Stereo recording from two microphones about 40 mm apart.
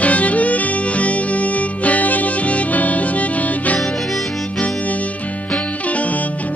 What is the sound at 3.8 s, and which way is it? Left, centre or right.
Music, centre.